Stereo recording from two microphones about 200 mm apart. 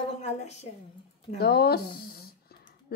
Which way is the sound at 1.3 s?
50° left (ahead or behind).